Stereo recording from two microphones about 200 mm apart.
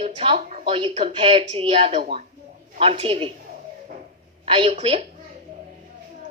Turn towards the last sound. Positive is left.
turn(degrees=-30)  # may be behind; listen again after turning